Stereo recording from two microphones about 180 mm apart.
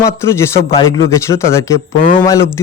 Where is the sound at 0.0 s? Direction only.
15° left (ahead or behind).